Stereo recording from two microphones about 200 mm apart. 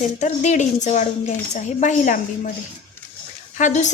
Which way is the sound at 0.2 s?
35° left (ahead or behind).